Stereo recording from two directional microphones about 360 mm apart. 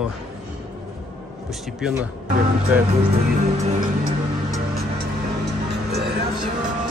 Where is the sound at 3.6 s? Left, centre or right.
Right.